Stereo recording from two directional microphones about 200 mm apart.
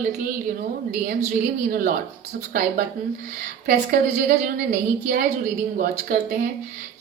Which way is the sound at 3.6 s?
50° right (ahead or behind).